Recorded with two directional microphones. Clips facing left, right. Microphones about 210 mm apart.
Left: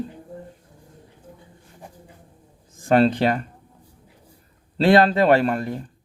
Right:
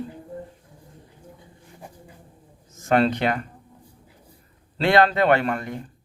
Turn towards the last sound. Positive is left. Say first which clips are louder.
# left 3 dB
turn(degrees=35)  # may be behind; listen again after turning